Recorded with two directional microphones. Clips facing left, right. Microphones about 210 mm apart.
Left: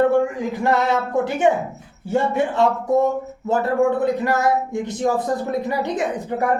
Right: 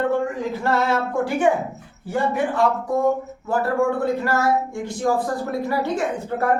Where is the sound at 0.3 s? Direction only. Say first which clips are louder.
Left 2 dB; 15° left (ahead or behind).